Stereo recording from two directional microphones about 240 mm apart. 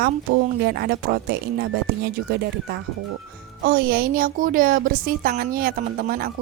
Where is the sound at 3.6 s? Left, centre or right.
Right.